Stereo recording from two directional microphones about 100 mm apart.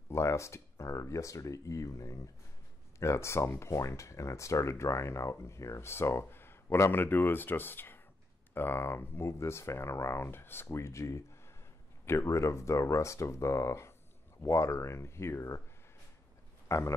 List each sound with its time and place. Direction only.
0.1 s speech: 30° left (ahead or behind)
16.6 s speech: 30° left (ahead or behind)